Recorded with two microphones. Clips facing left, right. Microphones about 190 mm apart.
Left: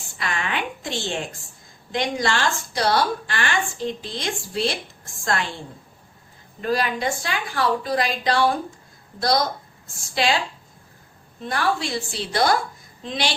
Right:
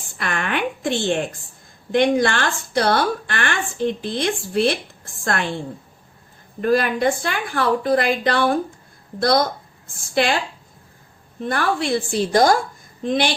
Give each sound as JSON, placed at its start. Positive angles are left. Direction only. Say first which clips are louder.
{"t": 0.2, "sound": "a sound", "louder": "right 4 dB", "side_deg": -55}
{"t": 1.9, "sound": "a woman's voice", "louder": "right 7 dB", "side_deg": -55}
{"t": 6.6, "sound": "a woman's voice", "louder": "right 5 dB", "side_deg": -55}
{"t": 9.8, "sound": "a woman's voice", "louder": "right 3 dB", "side_deg": -55}
{"t": 11.3, "sound": "a woman's voice", "louder": "right 2 dB", "side_deg": -55}